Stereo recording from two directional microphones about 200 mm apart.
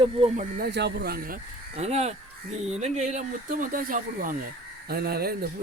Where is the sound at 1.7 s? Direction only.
35° right (ahead or behind).